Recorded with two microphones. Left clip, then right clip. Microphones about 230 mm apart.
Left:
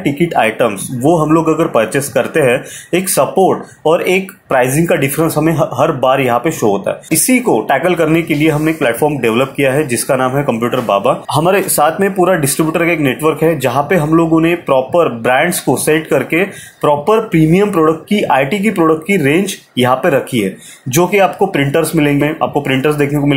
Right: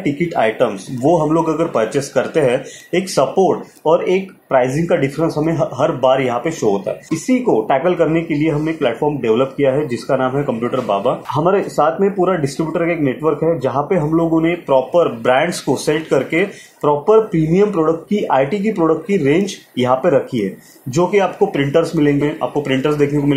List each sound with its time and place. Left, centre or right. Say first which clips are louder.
0.0 s speech: left 4 dB; left